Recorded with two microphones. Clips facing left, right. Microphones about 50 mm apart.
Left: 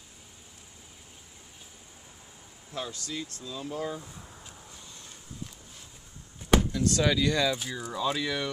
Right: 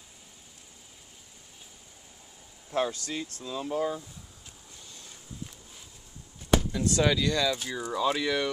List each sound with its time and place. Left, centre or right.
2.7 s speech: right
3.3 s speech: right
6.7 s speech: centre
7.2 s speech: centre
7.7 s speech: centre